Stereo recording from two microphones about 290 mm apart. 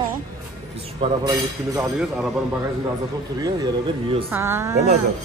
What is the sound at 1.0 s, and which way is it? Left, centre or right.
A woman's voice, centre.